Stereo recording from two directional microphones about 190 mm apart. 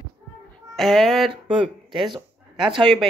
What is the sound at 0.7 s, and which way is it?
Speech, centre (ahead or behind).